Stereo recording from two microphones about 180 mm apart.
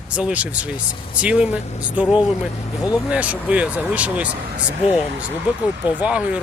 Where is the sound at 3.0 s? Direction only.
5° right (ahead or behind).